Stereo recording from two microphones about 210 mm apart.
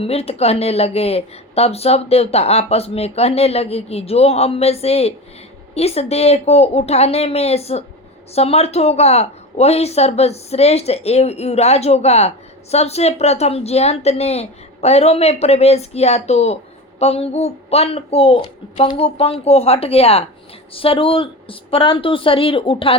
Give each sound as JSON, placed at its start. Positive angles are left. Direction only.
{"t": 0.0, "sound": "speech", "side_deg": 30}